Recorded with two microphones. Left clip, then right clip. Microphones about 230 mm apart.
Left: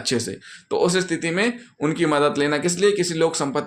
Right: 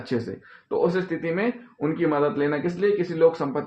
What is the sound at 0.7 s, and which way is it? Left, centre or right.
Speech, left.